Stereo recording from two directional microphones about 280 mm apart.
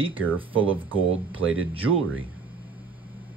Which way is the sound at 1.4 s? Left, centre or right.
Right.